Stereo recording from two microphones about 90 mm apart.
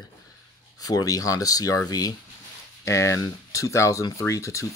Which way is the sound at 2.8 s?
35° left (ahead or behind).